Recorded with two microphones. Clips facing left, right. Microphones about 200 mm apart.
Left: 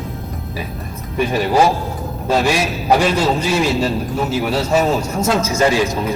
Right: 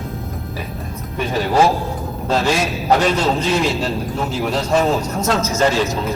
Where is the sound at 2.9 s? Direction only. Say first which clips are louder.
Left 1 dB; 10° left (ahead or behind).